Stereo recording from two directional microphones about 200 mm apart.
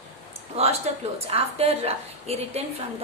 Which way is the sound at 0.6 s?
30° right (ahead or behind).